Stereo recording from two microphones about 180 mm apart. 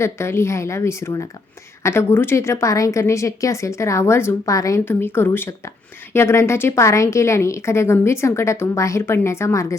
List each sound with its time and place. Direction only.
0.0 s a woman's voice: 15° left (ahead or behind)